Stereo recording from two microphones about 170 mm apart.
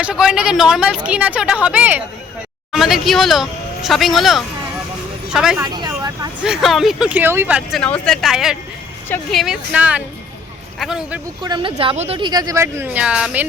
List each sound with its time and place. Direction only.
0.0 s speech: 5° right (ahead or behind)
5.5 s vehicle: 25° right (ahead or behind)
6.4 s speech: centre (ahead or behind)
7.8 s speech: 5° left (ahead or behind)
11.4 s speech: 30° right (ahead or behind); by 13.4 s 5° right (ahead or behind)